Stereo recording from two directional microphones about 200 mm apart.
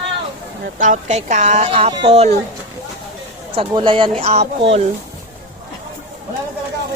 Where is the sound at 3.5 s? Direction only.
25° right (ahead or behind).